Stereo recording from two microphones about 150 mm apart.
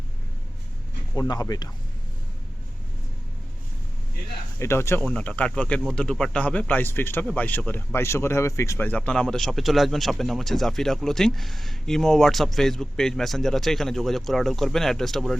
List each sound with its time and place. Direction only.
1.1 s speech: 25° left (ahead or behind)
4.6 s speech: 15° left (ahead or behind); by 15.4 s centre (ahead or behind)